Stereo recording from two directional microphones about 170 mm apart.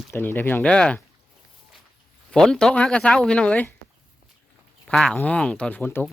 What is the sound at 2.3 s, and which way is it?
Speech, 5° left (ahead or behind).